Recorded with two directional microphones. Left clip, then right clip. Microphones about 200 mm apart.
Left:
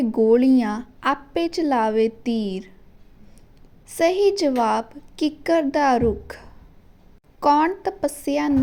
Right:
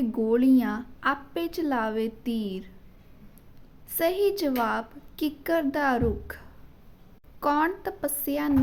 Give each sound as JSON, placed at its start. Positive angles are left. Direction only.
{"t": 0.0, "sound": "a woman's voice", "side_deg": 20}
{"t": 3.8, "sound": "a woman's voice", "side_deg": 20}